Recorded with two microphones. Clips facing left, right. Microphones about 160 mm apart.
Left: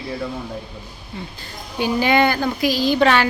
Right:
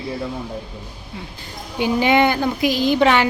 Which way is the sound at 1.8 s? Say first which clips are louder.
Right 1 dB; 20° right (ahead or behind).